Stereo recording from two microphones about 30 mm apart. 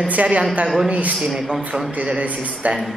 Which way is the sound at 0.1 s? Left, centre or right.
Right.